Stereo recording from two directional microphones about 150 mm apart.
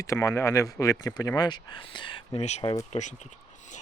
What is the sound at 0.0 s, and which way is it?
Speech, 20° left (ahead or behind).